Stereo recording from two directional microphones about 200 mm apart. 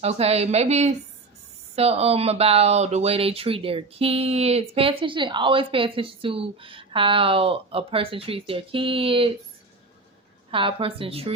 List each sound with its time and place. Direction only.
0.0 s a woman's voice: 30° right (ahead or behind)
10.5 s speech: 25° right (ahead or behind)